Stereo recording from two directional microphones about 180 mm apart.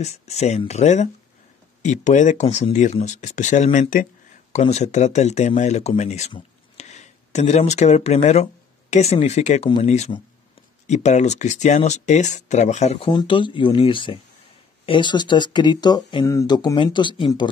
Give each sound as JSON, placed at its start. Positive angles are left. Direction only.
{"t": 0.3, "sound": "speech", "side_deg": 35}
{"t": 13.1, "sound": "speech", "side_deg": 25}